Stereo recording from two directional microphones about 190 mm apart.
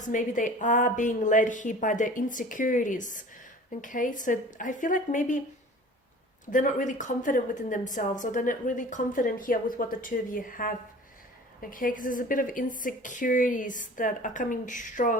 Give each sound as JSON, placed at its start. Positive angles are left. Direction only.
{"t": 0.0, "sound": "a woman's voice", "side_deg": 40}
{"t": 6.4, "sound": "a woman's voice", "side_deg": 45}